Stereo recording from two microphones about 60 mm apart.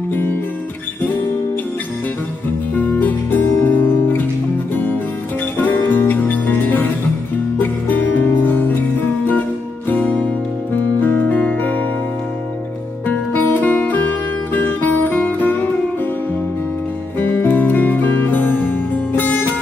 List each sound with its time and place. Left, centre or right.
0.1 s music: left
2.7 s music: left
5.6 s music: left
11.0 s music: left
13.0 s music: left
17.2 s music: left